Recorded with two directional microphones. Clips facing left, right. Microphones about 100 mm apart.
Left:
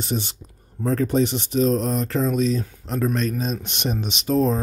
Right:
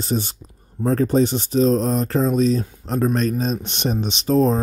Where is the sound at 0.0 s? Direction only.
40° right (ahead or behind).